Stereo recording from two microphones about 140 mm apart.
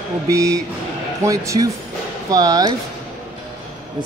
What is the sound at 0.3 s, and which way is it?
Speech, 20° right (ahead or behind).